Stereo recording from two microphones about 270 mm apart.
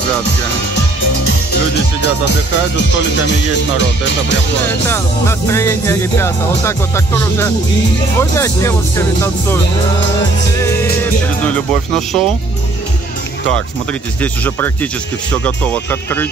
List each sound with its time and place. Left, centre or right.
2.0 s speech: left
4.8 s music: centre
11.4 s speech: centre
14.2 s speech: centre